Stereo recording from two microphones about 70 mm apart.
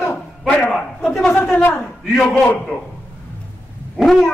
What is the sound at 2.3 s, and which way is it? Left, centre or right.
Speech, left.